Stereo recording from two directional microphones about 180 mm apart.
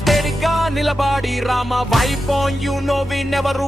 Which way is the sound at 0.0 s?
Centre (ahead or behind).